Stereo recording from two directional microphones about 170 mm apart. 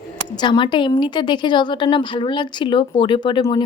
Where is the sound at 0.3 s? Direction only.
25° left (ahead or behind).